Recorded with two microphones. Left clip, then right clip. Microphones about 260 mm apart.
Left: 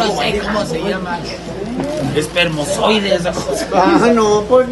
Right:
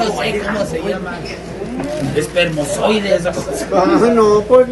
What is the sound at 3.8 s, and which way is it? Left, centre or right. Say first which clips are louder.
Speech: even; centre.